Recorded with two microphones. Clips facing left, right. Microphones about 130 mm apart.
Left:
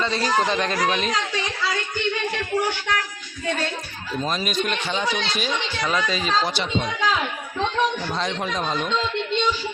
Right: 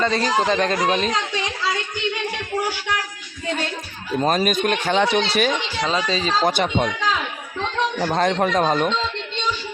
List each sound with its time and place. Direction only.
0.0 s speech: 45° right (ahead or behind)
4.2 s speech: 55° right (ahead or behind)
4.9 s speech: 70° right (ahead or behind)
5.8 s speech: 30° right (ahead or behind)
6.4 s speech: 50° right (ahead or behind)
7.9 s speech: 55° right (ahead or behind)